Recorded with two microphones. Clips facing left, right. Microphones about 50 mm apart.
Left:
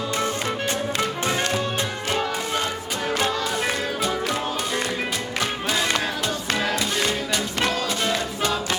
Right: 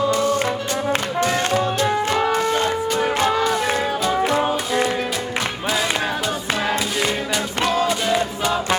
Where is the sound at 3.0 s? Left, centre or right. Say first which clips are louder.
Right 4 dB; right.